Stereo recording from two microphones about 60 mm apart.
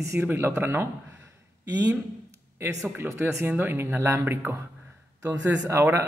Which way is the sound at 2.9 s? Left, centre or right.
Right.